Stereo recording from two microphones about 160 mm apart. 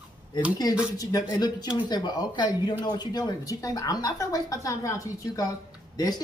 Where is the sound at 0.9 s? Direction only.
25° left (ahead or behind).